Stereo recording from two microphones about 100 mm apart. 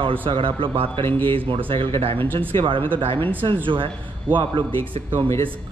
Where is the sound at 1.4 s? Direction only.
60° right (ahead or behind).